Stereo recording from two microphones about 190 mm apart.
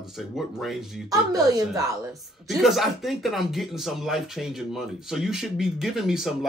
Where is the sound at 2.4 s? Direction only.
Centre (ahead or behind).